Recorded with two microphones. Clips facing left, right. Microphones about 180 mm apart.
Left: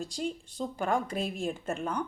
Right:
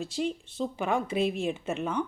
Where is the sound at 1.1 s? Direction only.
45° left (ahead or behind).